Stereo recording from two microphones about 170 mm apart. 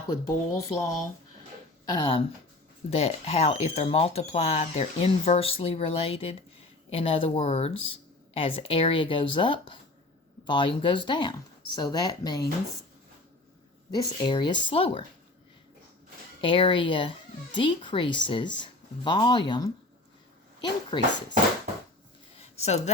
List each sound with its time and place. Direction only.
0.1 s speech: 20° left (ahead or behind)
1.9 s speech: 30° left (ahead or behind)
13.9 s speech: 25° left (ahead or behind)
16.4 s speech: 30° left (ahead or behind)
20.9 s speech: 25° left (ahead or behind)
22.4 s a sound: 40° left (ahead or behind)